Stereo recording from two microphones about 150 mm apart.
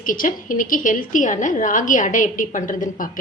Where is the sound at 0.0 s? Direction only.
65° left (ahead or behind).